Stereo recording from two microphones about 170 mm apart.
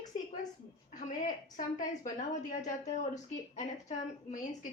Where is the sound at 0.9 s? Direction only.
50° left (ahead or behind).